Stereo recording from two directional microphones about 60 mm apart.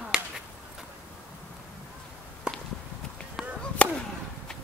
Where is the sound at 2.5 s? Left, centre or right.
Centre.